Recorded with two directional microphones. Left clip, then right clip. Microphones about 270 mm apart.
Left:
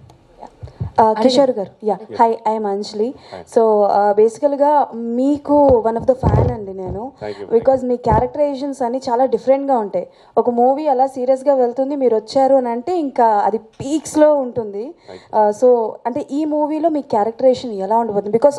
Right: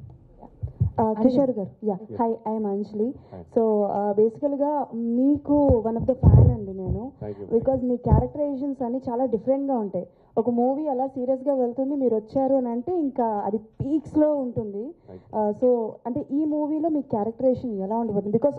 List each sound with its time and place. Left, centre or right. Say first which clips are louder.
0.9 s speech: left 10 dB; centre
15.3 s a woman's voice: left 9 dB; centre
16.0 s speech: left 6 dB; centre